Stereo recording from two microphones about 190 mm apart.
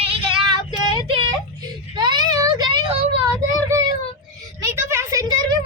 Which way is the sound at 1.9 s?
25° right (ahead or behind).